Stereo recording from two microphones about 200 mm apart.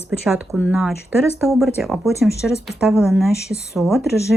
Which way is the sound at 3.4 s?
55° left (ahead or behind).